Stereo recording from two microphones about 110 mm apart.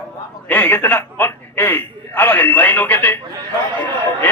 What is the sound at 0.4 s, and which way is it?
A man's voice, 15° left (ahead or behind).